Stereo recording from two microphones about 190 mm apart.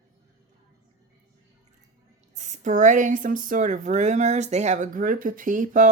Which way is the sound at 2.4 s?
40° right (ahead or behind).